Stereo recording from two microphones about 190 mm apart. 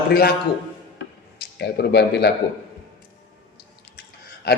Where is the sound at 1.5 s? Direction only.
60° left (ahead or behind).